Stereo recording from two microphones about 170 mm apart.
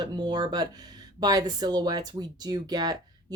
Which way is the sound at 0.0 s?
25° right (ahead or behind).